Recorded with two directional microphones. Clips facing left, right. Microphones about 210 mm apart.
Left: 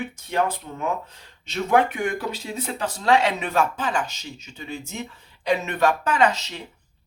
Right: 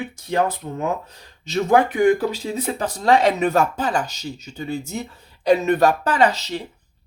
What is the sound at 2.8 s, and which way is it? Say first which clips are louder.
Speech: right 2 dB; 35° right (ahead or behind).